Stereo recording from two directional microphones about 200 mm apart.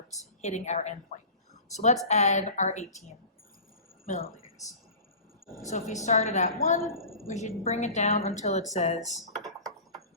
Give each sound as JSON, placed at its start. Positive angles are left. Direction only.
{"t": 0.4, "sound": "a woman's voice", "side_deg": 35}
{"t": 4.0, "sound": "a woman's voice", "side_deg": 40}
{"t": 5.6, "sound": "a woman's voice", "side_deg": 35}
{"t": 7.0, "sound": "a sound", "side_deg": 0}
{"t": 7.3, "sound": "a woman's voice", "side_deg": 30}